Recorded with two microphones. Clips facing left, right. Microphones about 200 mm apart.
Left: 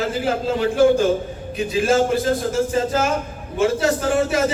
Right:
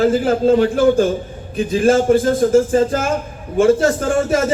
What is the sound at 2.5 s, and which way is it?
Speech, 50° right (ahead or behind).